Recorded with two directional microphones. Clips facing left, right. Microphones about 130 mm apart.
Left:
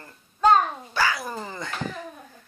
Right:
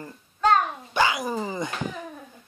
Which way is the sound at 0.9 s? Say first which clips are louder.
Right 3 dB; 20° right (ahead or behind).